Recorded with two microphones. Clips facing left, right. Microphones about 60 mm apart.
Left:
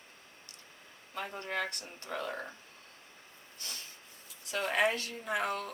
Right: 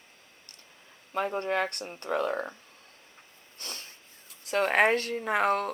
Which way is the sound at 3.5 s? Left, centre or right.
Right.